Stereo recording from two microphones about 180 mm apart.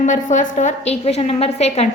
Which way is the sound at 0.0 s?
40° left (ahead or behind).